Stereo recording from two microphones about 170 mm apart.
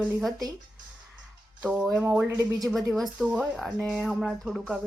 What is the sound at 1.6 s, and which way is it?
Speech, 5° right (ahead or behind).